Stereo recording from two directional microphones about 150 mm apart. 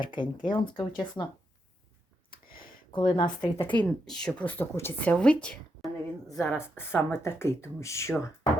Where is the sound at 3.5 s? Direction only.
10° left (ahead or behind).